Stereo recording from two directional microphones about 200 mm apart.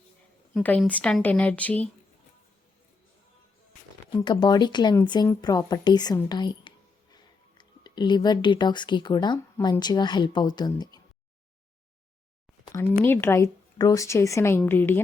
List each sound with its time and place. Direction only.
0.5 s speech: 5° left (ahead or behind)
4.0 s speech: 25° left (ahead or behind)
12.7 s speech: 10° left (ahead or behind)